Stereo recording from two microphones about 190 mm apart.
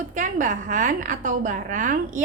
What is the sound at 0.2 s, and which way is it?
A woman's voice, 45° right (ahead or behind).